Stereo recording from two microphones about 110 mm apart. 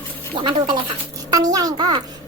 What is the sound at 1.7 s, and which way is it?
Speech, 50° right (ahead or behind).